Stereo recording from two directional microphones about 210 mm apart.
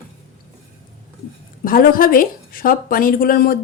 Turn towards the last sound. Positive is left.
turn(degrees=45)  # may be behind; listen again after turning